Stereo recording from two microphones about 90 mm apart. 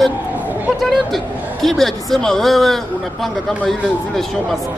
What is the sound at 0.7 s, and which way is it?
A man's voice, centre (ahead or behind).